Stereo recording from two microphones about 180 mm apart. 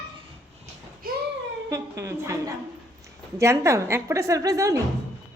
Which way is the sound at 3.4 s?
15° right (ahead or behind).